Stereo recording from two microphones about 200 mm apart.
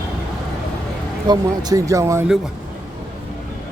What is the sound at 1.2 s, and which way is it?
Speech, 20° right (ahead or behind).